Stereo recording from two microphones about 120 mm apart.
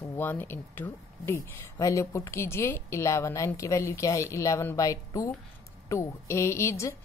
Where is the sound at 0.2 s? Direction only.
15° left (ahead or behind).